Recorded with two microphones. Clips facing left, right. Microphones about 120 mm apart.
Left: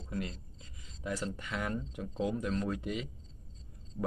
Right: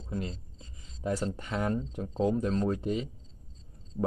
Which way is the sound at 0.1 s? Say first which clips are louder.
Right 3 dB; 25° right (ahead or behind).